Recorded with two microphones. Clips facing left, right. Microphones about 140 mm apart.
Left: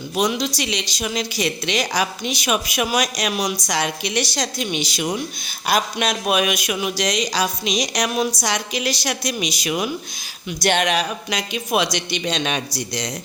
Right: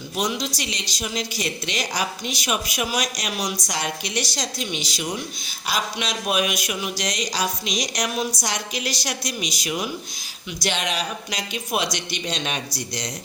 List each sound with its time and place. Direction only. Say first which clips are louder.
0.2 s a woman's voice: left 5 dB; 70° left (ahead or behind)
10.6 s speech: left 7 dB; 60° left (ahead or behind); by 13.1 s 80° left